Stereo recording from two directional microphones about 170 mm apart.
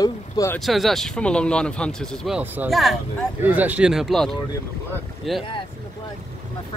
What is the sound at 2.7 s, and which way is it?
Speech, centre (ahead or behind).